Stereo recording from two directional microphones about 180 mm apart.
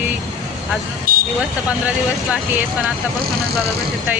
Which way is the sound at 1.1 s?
50° right (ahead or behind).